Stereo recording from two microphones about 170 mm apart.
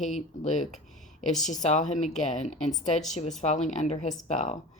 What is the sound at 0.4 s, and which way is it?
Speech, 45° left (ahead or behind).